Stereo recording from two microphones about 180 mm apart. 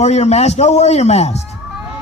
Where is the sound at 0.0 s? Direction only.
40° left (ahead or behind).